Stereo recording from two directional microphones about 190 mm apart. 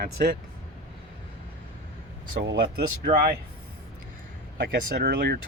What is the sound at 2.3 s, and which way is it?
Speech, 60° right (ahead or behind).